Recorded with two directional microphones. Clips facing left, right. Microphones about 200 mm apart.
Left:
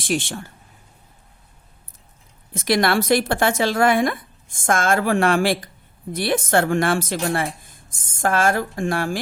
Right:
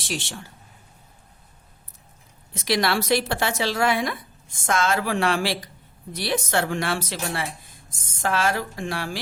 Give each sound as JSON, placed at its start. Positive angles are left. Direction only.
{"t": 0.0, "sound": "a woman's voice", "side_deg": 55}
{"t": 2.5, "sound": "a woman's voice", "side_deg": 50}